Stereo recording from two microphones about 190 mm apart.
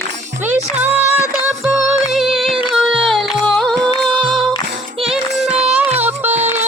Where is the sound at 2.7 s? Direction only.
Centre (ahead or behind).